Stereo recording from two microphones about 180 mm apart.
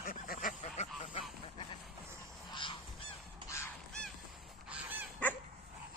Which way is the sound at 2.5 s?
25° left (ahead or behind).